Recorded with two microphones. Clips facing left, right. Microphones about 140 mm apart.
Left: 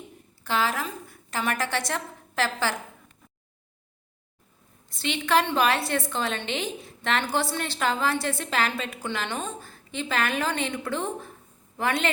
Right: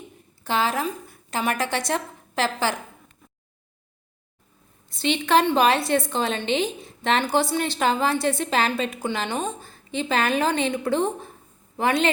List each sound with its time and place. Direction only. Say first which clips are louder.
0.4 s a woman's voice: right 3 dB; 20° right (ahead or behind)
4.9 s a woman's voice: right 4 dB; 20° right (ahead or behind)